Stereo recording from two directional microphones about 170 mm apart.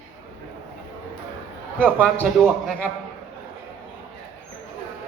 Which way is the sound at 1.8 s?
5° left (ahead or behind).